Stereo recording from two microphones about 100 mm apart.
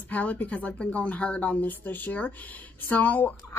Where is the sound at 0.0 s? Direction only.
15° left (ahead or behind).